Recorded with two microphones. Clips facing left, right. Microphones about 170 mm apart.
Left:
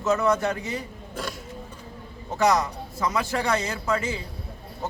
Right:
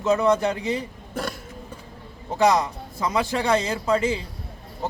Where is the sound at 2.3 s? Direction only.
30° right (ahead or behind).